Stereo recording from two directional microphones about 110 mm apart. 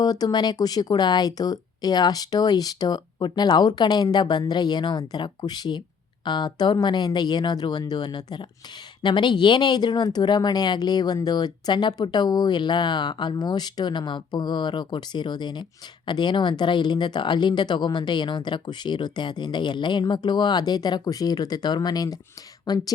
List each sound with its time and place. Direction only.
0.0 s speech: 35° left (ahead or behind)